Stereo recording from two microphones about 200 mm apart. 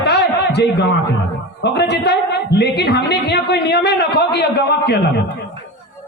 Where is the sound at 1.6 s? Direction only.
55° left (ahead or behind).